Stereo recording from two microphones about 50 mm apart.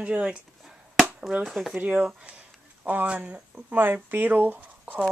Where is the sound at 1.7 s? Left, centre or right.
Right.